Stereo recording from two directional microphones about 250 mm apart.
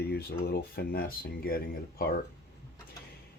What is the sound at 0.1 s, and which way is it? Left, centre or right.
Speech, left.